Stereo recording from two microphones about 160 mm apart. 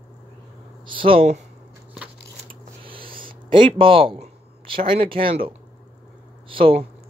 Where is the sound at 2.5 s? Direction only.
35° right (ahead or behind).